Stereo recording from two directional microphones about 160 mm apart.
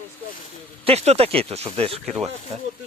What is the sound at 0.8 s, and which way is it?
Speech, 40° right (ahead or behind).